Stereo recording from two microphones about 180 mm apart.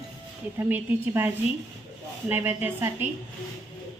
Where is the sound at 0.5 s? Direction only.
10° right (ahead or behind).